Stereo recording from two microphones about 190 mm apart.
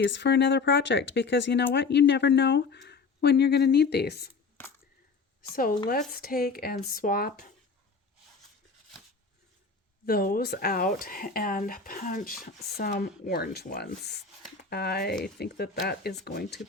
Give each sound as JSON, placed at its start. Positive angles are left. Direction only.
{"t": 0.0, "sound": "speech", "side_deg": 70}
{"t": 5.9, "sound": "speech", "side_deg": 50}
{"t": 10.1, "sound": "speech", "side_deg": 50}
{"t": 12.7, "sound": "speech", "side_deg": 55}